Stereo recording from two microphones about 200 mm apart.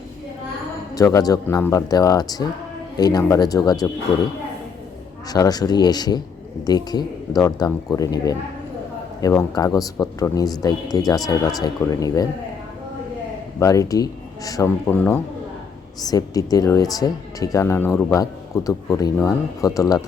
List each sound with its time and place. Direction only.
0.9 s speech: 20° left (ahead or behind)
5.3 s speech: 20° left (ahead or behind)
13.6 s speech: 15° left (ahead or behind)